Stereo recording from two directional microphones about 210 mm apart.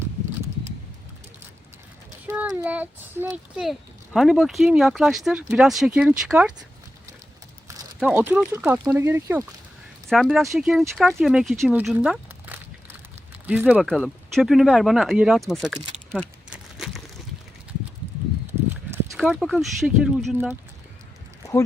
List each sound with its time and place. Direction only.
2.2 s speech: 10° right (ahead or behind)
7.9 s speech: 10° right (ahead or behind)
10.1 s speech: centre (ahead or behind)
15.4 s crumpling: centre (ahead or behind)
18.4 s horse: 10° right (ahead or behind)
19.1 s speech: centre (ahead or behind)